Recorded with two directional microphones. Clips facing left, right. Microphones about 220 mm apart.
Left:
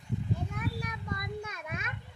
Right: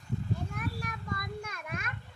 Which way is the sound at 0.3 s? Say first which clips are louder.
Left 1 dB; 20° left (ahead or behind).